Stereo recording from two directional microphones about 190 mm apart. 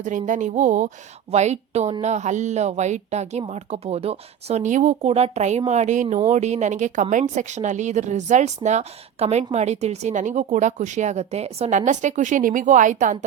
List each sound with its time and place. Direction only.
0.0 s speech: 40° right (ahead or behind)